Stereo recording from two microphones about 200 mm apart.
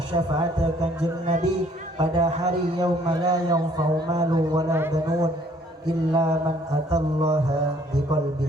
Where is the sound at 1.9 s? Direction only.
25° right (ahead or behind).